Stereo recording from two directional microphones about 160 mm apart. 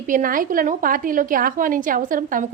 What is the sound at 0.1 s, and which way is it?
A woman's voice, 60° right (ahead or behind).